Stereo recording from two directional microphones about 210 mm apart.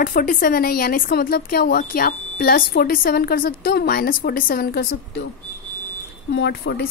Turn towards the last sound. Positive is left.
turn(degrees=55)  # may be behind; listen again after turning